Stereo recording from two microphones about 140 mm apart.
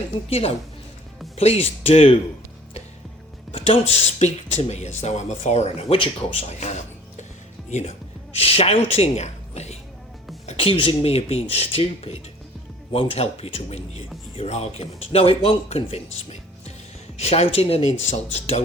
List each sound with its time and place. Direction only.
0.3 s speech: 45° left (ahead or behind)
3.5 s speech: 45° left (ahead or behind)
6.5 s music: 55° left (ahead or behind)
7.7 s speech: 55° left (ahead or behind)